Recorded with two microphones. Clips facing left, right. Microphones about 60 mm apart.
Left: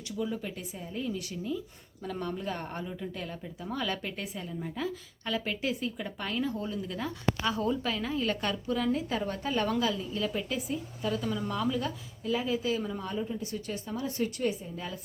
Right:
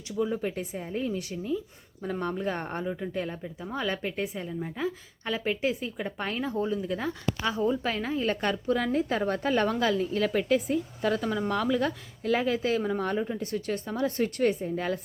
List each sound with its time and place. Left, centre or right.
0.2 s speech: right
7.4 s speech: centre
7.9 s a woman's voice: right